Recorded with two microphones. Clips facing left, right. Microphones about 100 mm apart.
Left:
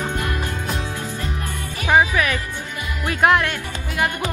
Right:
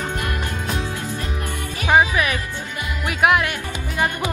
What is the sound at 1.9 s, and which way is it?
Music, 20° right (ahead or behind).